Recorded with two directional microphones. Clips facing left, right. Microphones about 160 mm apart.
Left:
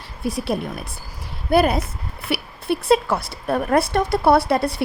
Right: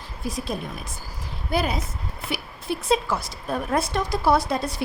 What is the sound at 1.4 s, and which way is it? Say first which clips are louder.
A woman's voice: left 8 dB; 60° left (ahead or behind).